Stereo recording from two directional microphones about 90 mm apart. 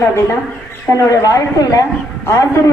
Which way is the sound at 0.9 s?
35° left (ahead or behind).